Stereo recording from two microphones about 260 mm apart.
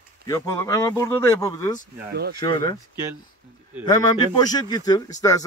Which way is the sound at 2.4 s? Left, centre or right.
Centre.